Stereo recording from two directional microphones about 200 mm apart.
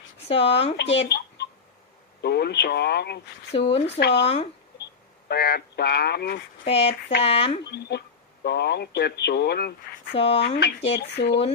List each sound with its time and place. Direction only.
0.3 s speech: 30° left (ahead or behind)
1.0 s a sound: 55° left (ahead or behind)
2.2 s speech: 55° left (ahead or behind)
3.5 s speech: 30° left (ahead or behind)
5.3 s speech: 55° left (ahead or behind)
6.7 s speech: 30° left (ahead or behind)
7.7 s speech: 55° left (ahead or behind)
10.2 s speech: 30° left (ahead or behind)
10.4 s speech: 55° left (ahead or behind)